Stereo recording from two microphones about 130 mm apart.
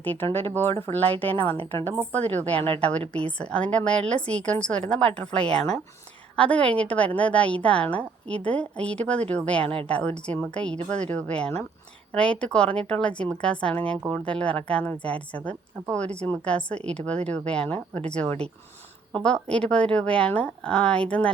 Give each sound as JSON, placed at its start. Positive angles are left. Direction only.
{"t": 0.0, "sound": "a woman's voice", "side_deg": 15}
{"t": 2.6, "sound": "a woman's voice", "side_deg": -50}
{"t": 3.1, "sound": "a woman's voice", "side_deg": 10}